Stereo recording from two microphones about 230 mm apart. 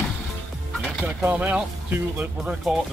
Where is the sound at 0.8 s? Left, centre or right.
Centre.